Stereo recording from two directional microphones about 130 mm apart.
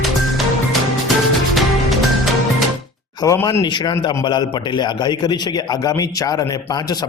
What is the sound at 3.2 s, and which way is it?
Speech, 25° left (ahead or behind).